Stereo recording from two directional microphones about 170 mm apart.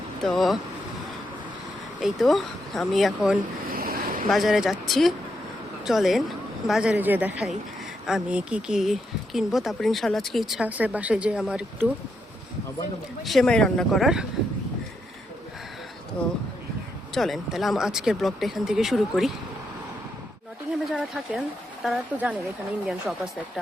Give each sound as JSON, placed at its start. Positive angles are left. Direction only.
{"t": 0.2, "sound": "speech", "side_deg": 0}
{"t": 2.0, "sound": "speech", "side_deg": 0}
{"t": 3.7, "sound": "a sound", "side_deg": -60}
{"t": 4.3, "sound": "speech", "side_deg": 0}
{"t": 13.2, "sound": "speech", "side_deg": 0}
{"t": 17.2, "sound": "speech", "side_deg": 0}
{"t": 20.7, "sound": "speech", "side_deg": -5}